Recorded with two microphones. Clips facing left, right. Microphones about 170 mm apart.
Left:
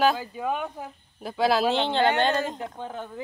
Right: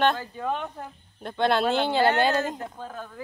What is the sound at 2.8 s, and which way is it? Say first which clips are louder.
Speech: left 2 dB; 20° left (ahead or behind).